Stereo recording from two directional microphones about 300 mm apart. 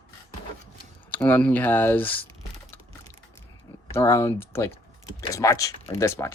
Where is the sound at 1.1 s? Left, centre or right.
Centre.